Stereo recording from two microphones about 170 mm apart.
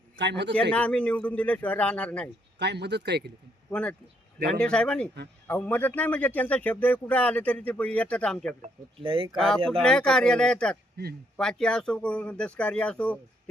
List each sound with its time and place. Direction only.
0.2 s a man's voice: 90° right
0.7 s speech: 5° left (ahead or behind)
2.6 s speech: 80° right
3.7 s speech: 5° left (ahead or behind)
8.4 s speech: 35° right (ahead or behind)
9.3 s speech: centre (ahead or behind)